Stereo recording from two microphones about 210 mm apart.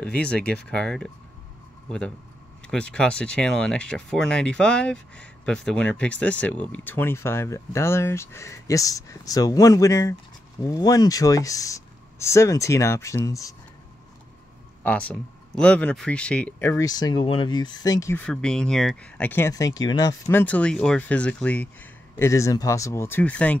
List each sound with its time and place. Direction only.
0.0 s speech: 5° left (ahead or behind)
14.8 s speech: 5° left (ahead or behind)